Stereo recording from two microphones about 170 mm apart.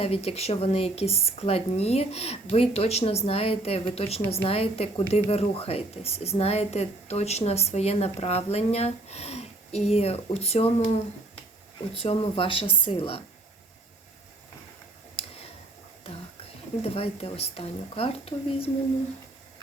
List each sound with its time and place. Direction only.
0.0 s speech: 35° left (ahead or behind)
15.2 s a sound: 35° left (ahead or behind)
16.0 s a woman's voice: 35° left (ahead or behind)